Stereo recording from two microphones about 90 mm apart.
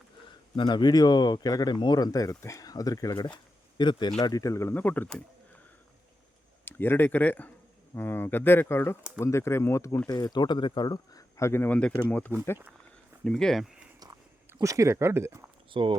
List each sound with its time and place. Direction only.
0.5 s speech: 55° left (ahead or behind)
3.8 s speech: 55° left (ahead or behind)
4.2 s speech: 40° left (ahead or behind)
4.7 s speech: 20° left (ahead or behind)
6.7 s speech: 25° left (ahead or behind)
10.1 s speech: 45° left (ahead or behind); by 11.8 s 25° left (ahead or behind)
13.2 s speech: 5° left (ahead or behind)
14.6 s speech: 35° right (ahead or behind)
15.7 s speech: 60° right (ahead or behind)